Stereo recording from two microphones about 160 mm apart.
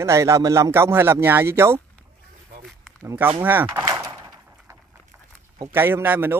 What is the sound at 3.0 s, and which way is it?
Speech, 15° right (ahead or behind).